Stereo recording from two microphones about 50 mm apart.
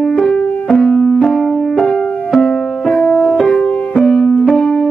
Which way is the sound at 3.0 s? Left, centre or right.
Left.